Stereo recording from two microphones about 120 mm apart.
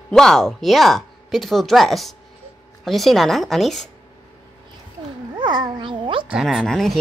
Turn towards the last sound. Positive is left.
turn(degrees=0)  # may be behind; listen again after turning